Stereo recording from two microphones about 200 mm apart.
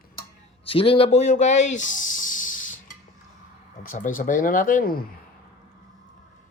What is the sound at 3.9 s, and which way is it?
Speech, 40° left (ahead or behind).